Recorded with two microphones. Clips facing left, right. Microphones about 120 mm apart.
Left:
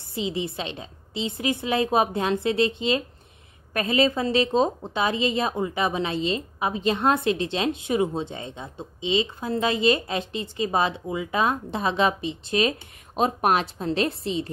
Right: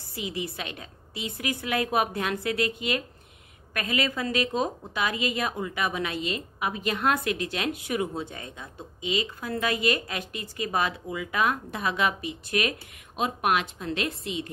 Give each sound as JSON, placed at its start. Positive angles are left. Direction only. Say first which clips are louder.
{"t": 0.1, "sound": "speech", "louder": "left 5 dB", "side_deg": 25}